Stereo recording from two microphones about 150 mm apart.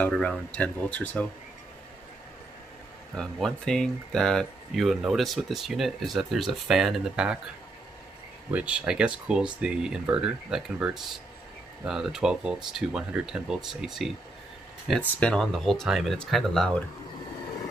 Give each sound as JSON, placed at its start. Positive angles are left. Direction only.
{"t": 0.0, "sound": "speech", "side_deg": 5}
{"t": 3.2, "sound": "speech", "side_deg": 5}
{"t": 8.5, "sound": "speech", "side_deg": -10}
{"t": 14.9, "sound": "speech", "side_deg": 5}